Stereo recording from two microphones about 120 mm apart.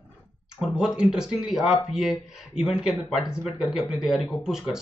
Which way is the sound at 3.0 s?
5° right (ahead or behind).